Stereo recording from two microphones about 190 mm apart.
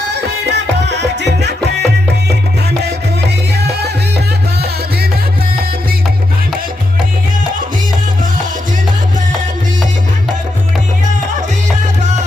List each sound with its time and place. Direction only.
0.1 s music: 60° right (ahead or behind)
3.6 s music: 60° right (ahead or behind)